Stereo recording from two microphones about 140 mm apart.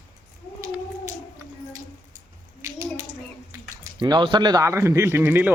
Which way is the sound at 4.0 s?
35° right (ahead or behind).